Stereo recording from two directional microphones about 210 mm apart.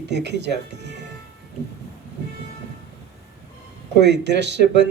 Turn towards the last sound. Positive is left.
turn(degrees=-55)  # may be behind; listen again after turning